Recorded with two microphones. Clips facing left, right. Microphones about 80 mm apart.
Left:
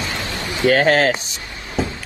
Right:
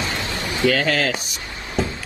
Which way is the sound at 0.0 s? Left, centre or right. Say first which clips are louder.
Even; right.